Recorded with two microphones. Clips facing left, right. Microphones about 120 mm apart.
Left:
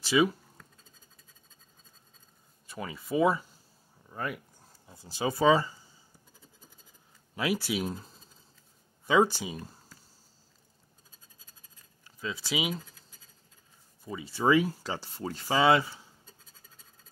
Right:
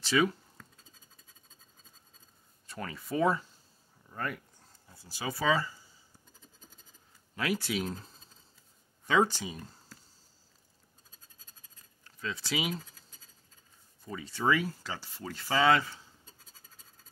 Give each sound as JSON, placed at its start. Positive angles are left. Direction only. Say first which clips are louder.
{"t": 0.0, "sound": "a sound", "louder": "left 3 dB", "side_deg": 10}
{"t": 2.6, "sound": "speech", "louder": "left 2 dB", "side_deg": 5}
{"t": 4.1, "sound": "a sound", "louder": "left 1 dB", "side_deg": 10}
{"t": 4.8, "sound": "speech", "louder": "left 6 dB", "side_deg": 20}
{"t": 7.3, "sound": "speech", "louder": "left 2 dB", "side_deg": 10}
{"t": 9.0, "sound": "speech", "louder": "left 3 dB", "side_deg": 10}
{"t": 12.0, "sound": "speech", "louder": "left 1 dB", "side_deg": 10}
{"t": 14.0, "sound": "speech", "louder": "left 3 dB", "side_deg": 10}
{"t": 15.3, "sound": "speech", "louder": "left 2 dB", "side_deg": 20}
{"t": 16.3, "sound": "scratch", "louder": "left 1 dB", "side_deg": 0}